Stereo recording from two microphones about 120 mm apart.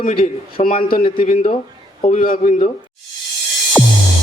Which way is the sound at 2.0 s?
70° left (ahead or behind).